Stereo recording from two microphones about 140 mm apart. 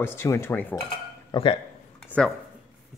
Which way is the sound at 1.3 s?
40° left (ahead or behind).